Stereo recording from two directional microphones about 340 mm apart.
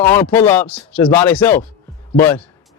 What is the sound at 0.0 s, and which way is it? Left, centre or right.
A man's voice, centre.